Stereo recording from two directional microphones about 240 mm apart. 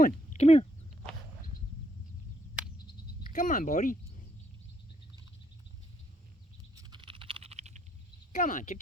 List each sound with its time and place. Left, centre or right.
0.0 s speech: left
3.3 s speech: left
6.7 s computer keyboard: centre
8.3 s speech: left